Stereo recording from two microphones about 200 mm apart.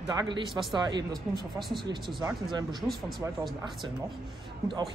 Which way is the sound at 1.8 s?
25° right (ahead or behind).